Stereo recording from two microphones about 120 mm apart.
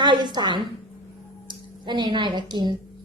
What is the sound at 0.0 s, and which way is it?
A woman's voice, 40° right (ahead or behind).